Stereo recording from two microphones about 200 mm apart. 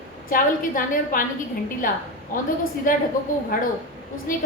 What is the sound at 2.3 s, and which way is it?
A woman's voice, 40° left (ahead or behind).